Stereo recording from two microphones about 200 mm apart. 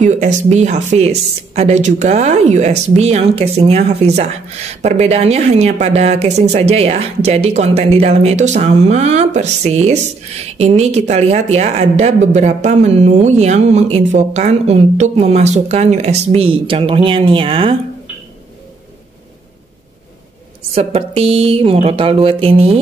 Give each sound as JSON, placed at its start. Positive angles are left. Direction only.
{"t": 0.0, "sound": "speech", "side_deg": -35}
{"t": 20.7, "sound": "speech", "side_deg": -30}